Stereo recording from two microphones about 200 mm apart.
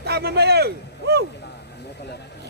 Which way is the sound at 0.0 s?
55° right (ahead or behind).